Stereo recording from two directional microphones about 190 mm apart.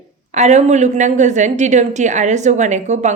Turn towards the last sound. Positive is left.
turn(degrees=-40)  # may be behind; listen again after turning